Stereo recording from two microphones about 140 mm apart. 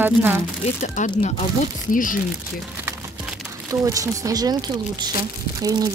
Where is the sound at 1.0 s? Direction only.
60° left (ahead or behind).